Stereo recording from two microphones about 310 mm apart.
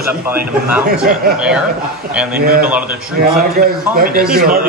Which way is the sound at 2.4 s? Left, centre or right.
Right.